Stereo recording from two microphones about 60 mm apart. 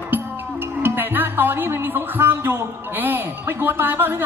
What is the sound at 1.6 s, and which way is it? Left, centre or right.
Speech, right.